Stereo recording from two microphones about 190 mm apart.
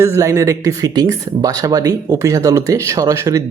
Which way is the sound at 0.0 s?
15° right (ahead or behind).